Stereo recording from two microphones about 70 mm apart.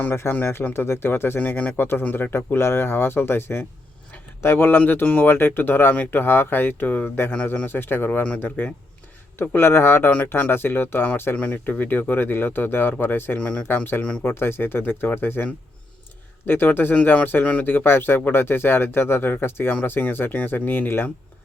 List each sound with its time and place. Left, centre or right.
0.0 s speech: left
2.3 s speech: left
14.3 s speech: left
17.7 s speech: left